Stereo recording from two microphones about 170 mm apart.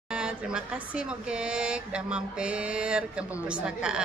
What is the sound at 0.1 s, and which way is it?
Speech, 5° right (ahead or behind).